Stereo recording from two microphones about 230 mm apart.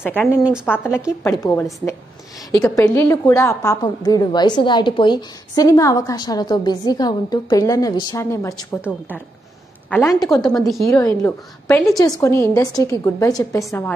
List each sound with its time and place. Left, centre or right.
0.0 s a woman's voice: centre
9.8 s a woman's voice: centre
10.3 s a woman's voice: centre
10.9 s a woman's voice: centre